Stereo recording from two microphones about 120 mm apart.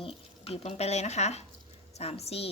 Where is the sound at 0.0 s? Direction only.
55° left (ahead or behind).